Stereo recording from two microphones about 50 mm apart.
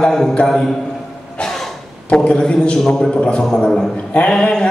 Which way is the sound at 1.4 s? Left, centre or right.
Centre.